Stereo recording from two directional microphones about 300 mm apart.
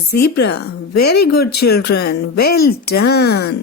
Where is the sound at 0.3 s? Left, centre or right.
Left.